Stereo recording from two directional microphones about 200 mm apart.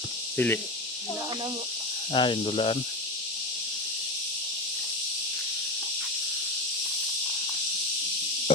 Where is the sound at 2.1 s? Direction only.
25° left (ahead or behind).